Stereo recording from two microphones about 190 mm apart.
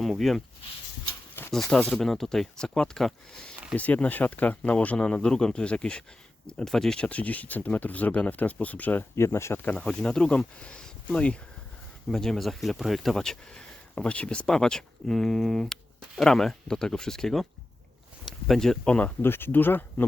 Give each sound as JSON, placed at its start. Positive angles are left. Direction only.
{"t": 0.0, "sound": "speech", "side_deg": 0}
{"t": 1.5, "sound": "speech", "side_deg": 5}